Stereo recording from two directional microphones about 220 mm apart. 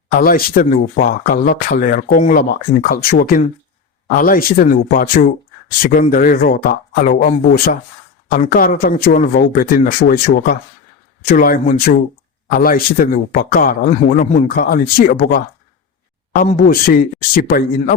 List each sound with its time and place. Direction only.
0.2 s speech: 40° left (ahead or behind)